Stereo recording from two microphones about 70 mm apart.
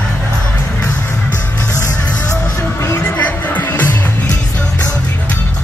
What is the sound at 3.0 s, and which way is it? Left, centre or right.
Music, left.